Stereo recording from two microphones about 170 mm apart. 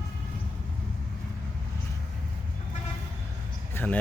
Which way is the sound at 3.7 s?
10° left (ahead or behind).